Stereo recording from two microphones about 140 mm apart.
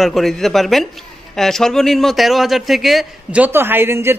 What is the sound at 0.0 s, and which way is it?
A man's voice, centre (ahead or behind).